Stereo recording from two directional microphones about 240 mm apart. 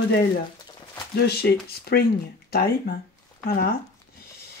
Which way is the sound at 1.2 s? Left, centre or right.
Left.